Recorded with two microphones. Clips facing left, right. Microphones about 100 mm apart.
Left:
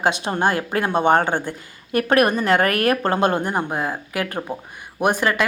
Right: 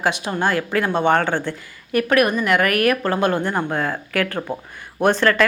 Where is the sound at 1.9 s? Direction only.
30° left (ahead or behind); by 5.4 s 15° left (ahead or behind).